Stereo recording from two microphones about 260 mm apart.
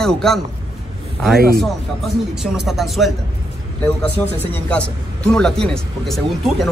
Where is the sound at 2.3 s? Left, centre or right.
Centre.